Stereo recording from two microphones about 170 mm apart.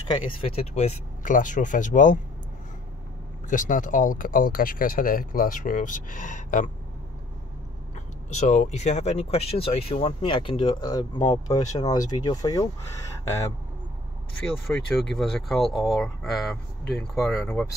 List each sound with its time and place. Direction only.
0.5 s speech: 35° left (ahead or behind)
3.4 s speech: 50° left (ahead or behind)
8.4 s speech: 45° left (ahead or behind); by 12.6 s 25° left (ahead or behind)
14.4 s speech: 5° left (ahead or behind)